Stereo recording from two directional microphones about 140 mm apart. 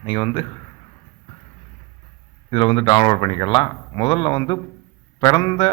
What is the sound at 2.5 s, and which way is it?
A man's voice, 40° left (ahead or behind).